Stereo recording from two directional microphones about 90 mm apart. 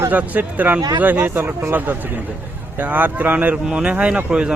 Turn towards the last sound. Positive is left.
turn(degrees=-10)  # may be behind; listen again after turning